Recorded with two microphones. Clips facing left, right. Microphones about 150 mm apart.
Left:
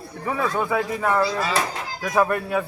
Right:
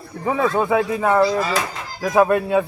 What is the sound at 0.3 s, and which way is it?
Speech, 20° right (ahead or behind).